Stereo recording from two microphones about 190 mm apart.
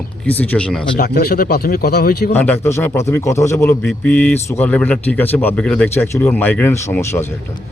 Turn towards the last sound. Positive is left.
turn(degrees=10)  # may be behind; listen again after turning